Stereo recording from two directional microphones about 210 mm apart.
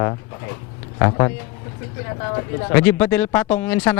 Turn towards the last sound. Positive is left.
turn(degrees=10)  # may be behind; listen again after turning